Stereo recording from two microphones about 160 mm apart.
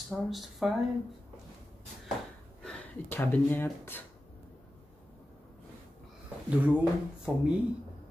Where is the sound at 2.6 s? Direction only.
15° left (ahead or behind).